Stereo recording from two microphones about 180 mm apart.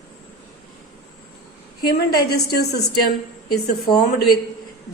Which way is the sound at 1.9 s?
60° left (ahead or behind).